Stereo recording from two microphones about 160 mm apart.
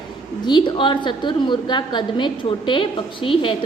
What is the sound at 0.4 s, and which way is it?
A woman's voice, 30° left (ahead or behind).